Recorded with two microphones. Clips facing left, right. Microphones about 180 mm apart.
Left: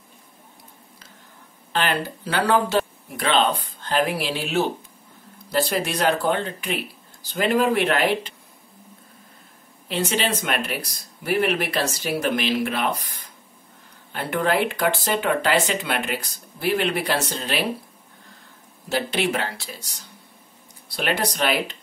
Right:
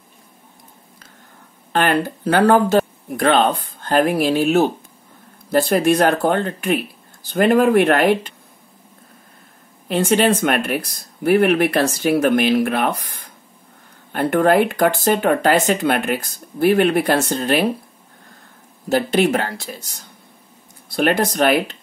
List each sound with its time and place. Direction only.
1.7 s speech: 50° right (ahead or behind)
9.8 s speech: 50° right (ahead or behind)
18.9 s speech: 45° right (ahead or behind)
20.9 s speech: 50° right (ahead or behind)